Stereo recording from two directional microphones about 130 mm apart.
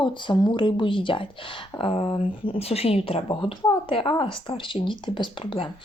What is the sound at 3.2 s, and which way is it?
Speech, 40° left (ahead or behind).